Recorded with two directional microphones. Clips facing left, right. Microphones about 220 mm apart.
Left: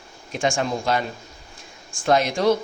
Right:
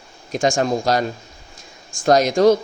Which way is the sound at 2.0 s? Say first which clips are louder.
Right 5 dB; 40° right (ahead or behind).